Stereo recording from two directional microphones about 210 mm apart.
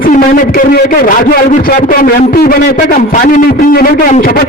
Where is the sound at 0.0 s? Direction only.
40° left (ahead or behind).